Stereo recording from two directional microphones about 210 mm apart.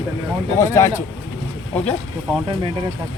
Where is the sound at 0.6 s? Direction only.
15° left (ahead or behind).